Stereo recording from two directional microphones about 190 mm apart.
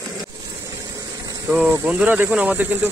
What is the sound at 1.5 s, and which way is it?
Speech, 10° right (ahead or behind).